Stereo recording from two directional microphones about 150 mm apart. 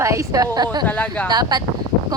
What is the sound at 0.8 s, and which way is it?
Speech, 10° left (ahead or behind).